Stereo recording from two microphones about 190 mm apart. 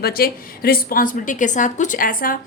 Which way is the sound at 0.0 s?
50° left (ahead or behind).